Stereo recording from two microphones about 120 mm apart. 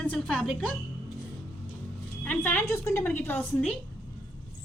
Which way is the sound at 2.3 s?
15° left (ahead or behind).